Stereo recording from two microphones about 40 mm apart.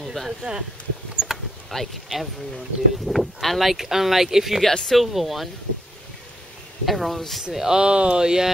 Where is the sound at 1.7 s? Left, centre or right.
Centre.